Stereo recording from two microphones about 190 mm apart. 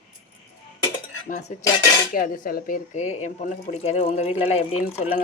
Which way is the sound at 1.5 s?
40° left (ahead or behind).